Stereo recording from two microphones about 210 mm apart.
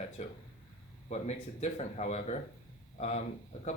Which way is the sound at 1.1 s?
30° left (ahead or behind).